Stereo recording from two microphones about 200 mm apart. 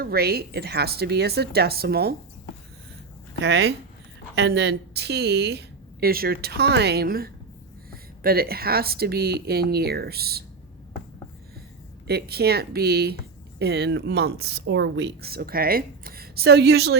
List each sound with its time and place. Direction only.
0.0 s speech: 50° right (ahead or behind)
3.4 s a woman's voice: 55° right (ahead or behind)
12.0 s speech: 50° right (ahead or behind)